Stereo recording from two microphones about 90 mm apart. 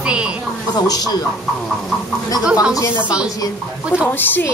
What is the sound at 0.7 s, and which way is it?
Speech, 50° left (ahead or behind).